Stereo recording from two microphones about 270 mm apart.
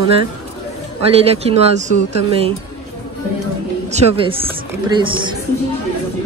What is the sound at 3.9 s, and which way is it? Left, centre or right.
Speech, centre.